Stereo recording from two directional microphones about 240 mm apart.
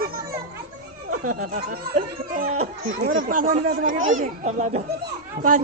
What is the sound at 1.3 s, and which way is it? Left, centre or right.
A child's voice, right.